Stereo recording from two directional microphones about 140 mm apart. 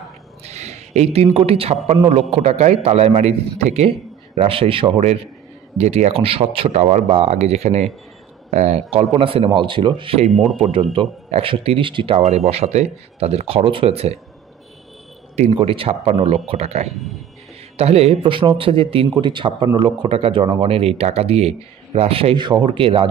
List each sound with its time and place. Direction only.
0.4 s a sound: 50° right (ahead or behind)
2.0 s speech: 45° right (ahead or behind)
10.3 s speech: centre (ahead or behind)
10.7 s speech: 35° right (ahead or behind)
12.2 s speech: 50° right (ahead or behind)
15.3 s speech: 45° right (ahead or behind)